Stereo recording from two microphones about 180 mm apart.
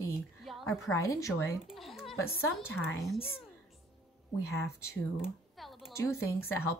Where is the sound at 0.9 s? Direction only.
20° left (ahead or behind).